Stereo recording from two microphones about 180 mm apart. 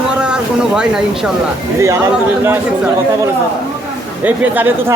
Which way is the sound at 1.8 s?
15° right (ahead or behind).